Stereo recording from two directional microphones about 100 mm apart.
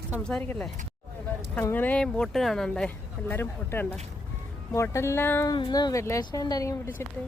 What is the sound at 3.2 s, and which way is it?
Speech, 20° left (ahead or behind).